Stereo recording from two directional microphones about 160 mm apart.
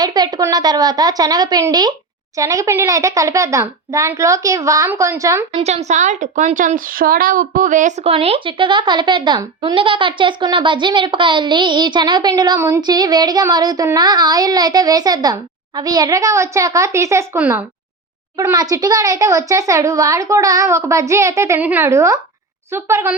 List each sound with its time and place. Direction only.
0.0 s a woman's voice: 25° right (ahead or behind)
5.5 s a child's voice: 45° right (ahead or behind); by 23.1 s 15° right (ahead or behind)